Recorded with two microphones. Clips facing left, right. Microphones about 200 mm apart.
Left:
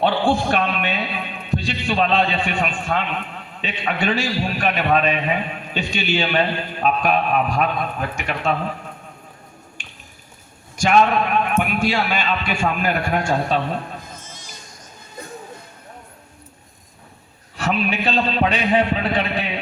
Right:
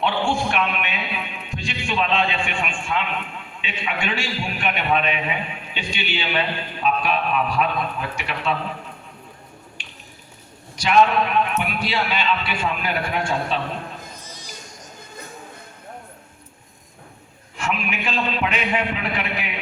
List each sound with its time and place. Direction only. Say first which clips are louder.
0.0 s a sound: left 4 dB; 35° left (ahead or behind)
1.5 s a man's voice: left 6 dB; 35° left (ahead or behind)
9.8 s finger snapping: even; 45° left (ahead or behind)
10.8 s a man's voice: left 1 dB; 45° left (ahead or behind)
17.6 s a man's voice: left 5 dB; 35° left (ahead or behind)